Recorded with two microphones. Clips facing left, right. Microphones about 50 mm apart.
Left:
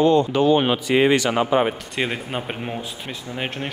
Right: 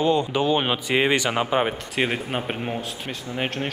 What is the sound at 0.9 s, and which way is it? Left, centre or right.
Speech, right.